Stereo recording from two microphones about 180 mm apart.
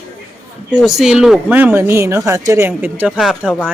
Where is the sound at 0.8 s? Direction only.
Centre (ahead or behind).